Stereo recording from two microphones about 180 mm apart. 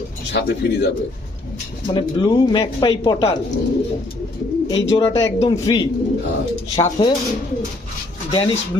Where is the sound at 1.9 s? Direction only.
25° left (ahead or behind).